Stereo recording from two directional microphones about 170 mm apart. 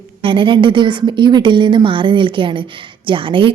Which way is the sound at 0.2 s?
30° right (ahead or behind).